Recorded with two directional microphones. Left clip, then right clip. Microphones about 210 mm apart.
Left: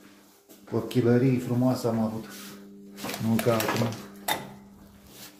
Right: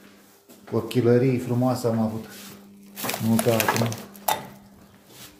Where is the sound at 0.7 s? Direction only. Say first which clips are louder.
Right 4 dB; 10° right (ahead or behind).